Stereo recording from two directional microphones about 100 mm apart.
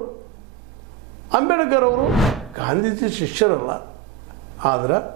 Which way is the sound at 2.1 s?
Centre (ahead or behind).